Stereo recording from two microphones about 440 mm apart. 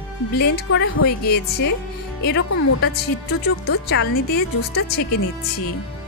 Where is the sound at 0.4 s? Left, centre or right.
Left.